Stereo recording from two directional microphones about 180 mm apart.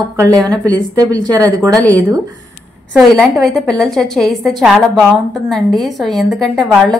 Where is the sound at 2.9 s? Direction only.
Centre (ahead or behind).